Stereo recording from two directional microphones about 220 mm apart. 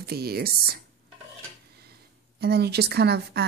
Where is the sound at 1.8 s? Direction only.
45° right (ahead or behind).